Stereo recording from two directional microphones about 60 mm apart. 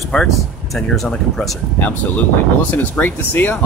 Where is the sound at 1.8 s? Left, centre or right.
Left.